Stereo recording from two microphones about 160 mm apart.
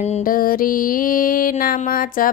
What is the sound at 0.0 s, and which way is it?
Music, 55° left (ahead or behind).